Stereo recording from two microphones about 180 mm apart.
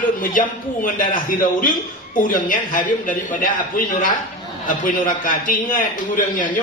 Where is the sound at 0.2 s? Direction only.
50° left (ahead or behind).